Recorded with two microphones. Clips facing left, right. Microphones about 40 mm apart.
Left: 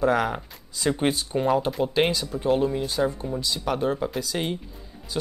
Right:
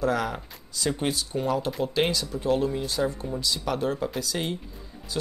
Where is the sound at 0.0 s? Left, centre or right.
Left.